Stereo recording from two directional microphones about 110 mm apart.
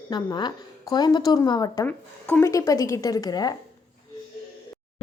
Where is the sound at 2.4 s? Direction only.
30° left (ahead or behind).